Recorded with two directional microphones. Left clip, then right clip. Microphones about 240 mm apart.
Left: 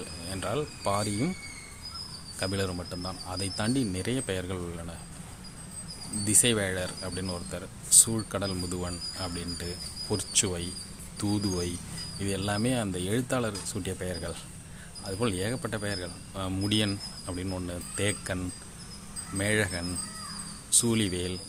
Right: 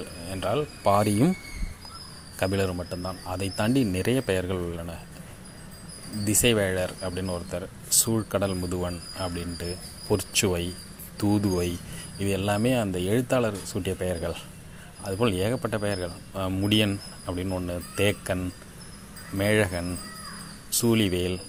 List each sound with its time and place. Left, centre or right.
0.3 s speech: centre
0.9 s speech: right
2.4 s speech: centre
6.2 s speech: centre